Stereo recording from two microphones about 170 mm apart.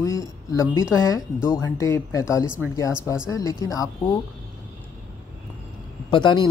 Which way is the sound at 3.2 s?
20° left (ahead or behind).